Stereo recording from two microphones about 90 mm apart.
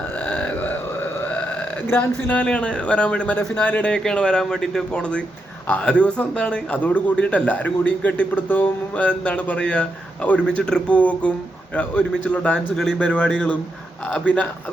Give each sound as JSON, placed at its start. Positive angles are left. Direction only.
{"t": 1.9, "sound": "a man's voice", "side_deg": 20}